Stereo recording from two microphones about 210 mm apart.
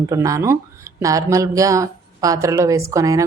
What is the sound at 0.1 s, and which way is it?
Speech, 15° right (ahead or behind).